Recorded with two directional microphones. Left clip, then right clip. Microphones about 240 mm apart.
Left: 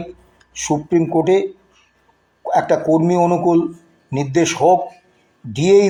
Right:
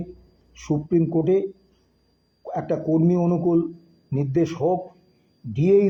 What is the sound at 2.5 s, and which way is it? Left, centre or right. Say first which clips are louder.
A man's voice: left 9 dB; left.